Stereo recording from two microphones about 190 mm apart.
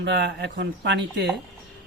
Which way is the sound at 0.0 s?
65° right (ahead or behind).